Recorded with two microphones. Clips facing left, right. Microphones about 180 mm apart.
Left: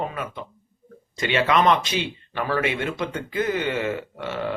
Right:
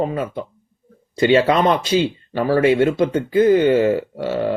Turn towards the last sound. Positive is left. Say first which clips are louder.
# right 7 dB
turn(degrees=-30)  # may be behind; listen again after turning